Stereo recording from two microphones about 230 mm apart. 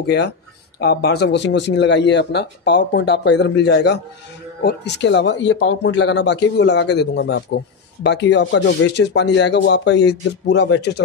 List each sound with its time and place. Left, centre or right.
0.0 s speech: left